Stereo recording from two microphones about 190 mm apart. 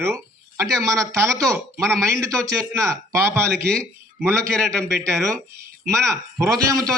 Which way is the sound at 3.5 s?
5° left (ahead or behind).